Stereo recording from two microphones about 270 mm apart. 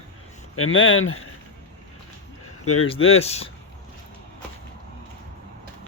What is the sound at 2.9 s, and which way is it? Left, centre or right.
Speech, left.